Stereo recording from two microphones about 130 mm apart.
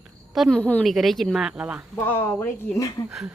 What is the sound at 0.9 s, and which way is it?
Speech, centre (ahead or behind).